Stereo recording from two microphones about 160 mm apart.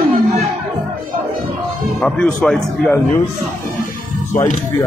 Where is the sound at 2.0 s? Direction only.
5° left (ahead or behind).